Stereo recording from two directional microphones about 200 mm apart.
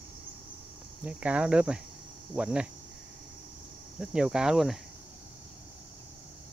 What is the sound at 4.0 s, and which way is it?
Speech, 5° right (ahead or behind).